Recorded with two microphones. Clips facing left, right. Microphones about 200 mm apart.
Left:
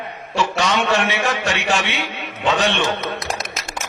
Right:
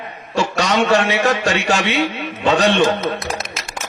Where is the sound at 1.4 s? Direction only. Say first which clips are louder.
Right 3 dB; 40° right (ahead or behind).